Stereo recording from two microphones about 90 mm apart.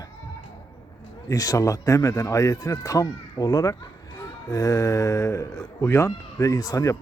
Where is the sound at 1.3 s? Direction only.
40° left (ahead or behind).